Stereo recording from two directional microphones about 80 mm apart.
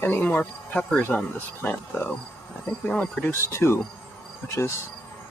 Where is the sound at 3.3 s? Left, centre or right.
Left.